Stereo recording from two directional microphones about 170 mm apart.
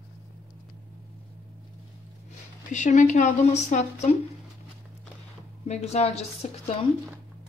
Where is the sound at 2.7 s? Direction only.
45° left (ahead or behind).